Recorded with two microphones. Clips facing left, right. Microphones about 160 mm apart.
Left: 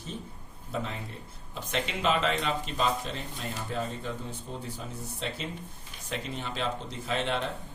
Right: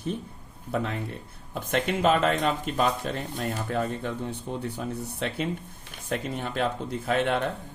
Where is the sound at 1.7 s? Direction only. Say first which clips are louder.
Right 5 dB; 50° right (ahead or behind).